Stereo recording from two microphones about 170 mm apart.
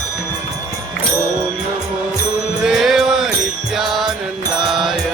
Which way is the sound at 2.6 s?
Centre (ahead or behind).